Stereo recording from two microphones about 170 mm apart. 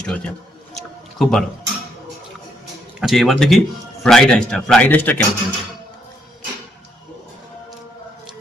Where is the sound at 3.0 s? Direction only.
Centre (ahead or behind).